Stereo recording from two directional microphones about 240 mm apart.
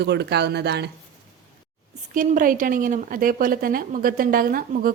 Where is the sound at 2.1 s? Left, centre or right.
Right.